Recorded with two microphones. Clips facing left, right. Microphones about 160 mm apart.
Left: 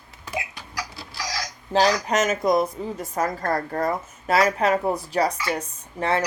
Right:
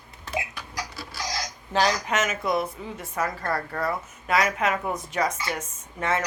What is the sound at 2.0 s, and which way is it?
A woman's voice, 40° left (ahead or behind).